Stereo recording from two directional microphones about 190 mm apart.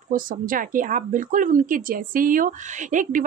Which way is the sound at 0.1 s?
45° right (ahead or behind).